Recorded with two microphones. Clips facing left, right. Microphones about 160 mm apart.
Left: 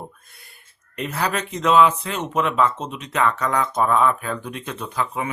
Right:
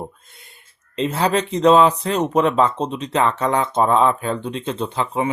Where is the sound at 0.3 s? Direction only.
20° right (ahead or behind).